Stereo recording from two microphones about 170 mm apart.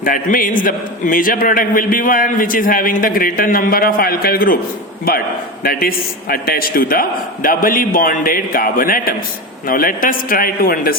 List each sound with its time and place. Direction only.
0.0 s a man's voice: 55° left (ahead or behind)
5.6 s a man's voice: 60° left (ahead or behind)